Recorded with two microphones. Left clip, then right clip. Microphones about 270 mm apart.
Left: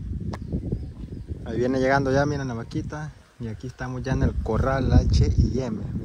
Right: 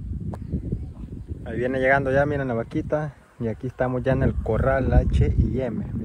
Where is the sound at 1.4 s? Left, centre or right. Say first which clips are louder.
Right 1 dB; left.